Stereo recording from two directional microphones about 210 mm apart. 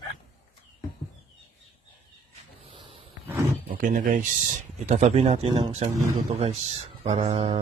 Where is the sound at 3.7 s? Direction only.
40° right (ahead or behind).